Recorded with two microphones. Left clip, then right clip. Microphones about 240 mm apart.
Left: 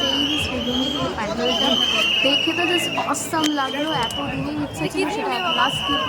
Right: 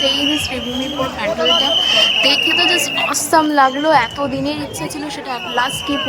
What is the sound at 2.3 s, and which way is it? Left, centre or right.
A woman's voice, right.